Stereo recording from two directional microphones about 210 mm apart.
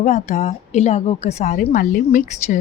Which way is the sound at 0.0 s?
35° left (ahead or behind).